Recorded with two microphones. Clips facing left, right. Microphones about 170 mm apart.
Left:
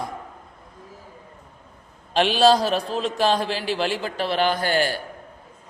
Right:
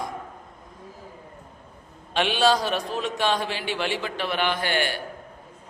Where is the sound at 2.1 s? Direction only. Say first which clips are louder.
Left 4 dB; 35° left (ahead or behind).